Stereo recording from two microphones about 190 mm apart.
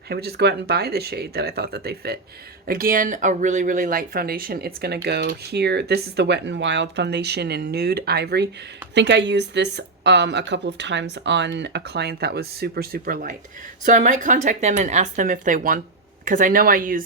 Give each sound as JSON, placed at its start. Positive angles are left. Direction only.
{"t": 0.1, "sound": "speech", "side_deg": -55}